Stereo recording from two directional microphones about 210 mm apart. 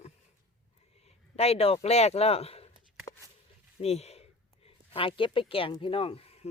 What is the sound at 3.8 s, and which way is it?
Speech, 30° left (ahead or behind).